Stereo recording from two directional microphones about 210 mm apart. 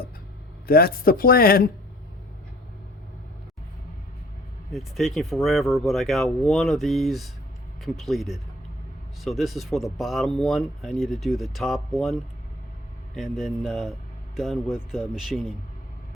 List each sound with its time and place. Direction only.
0.7 s speech: 45° left (ahead or behind)
4.7 s speech: centre (ahead or behind)
13.1 s speech: centre (ahead or behind)